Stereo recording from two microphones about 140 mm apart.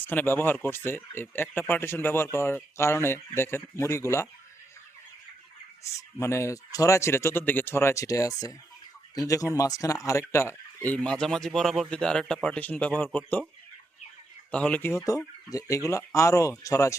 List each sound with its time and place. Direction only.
0.0 s speech: 15° left (ahead or behind)
5.8 s speech: 20° left (ahead or behind)
10.8 s speech: 10° left (ahead or behind)
14.5 s speech: 10° left (ahead or behind)